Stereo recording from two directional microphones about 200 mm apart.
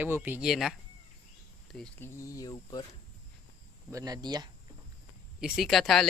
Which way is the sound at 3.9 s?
20° right (ahead or behind).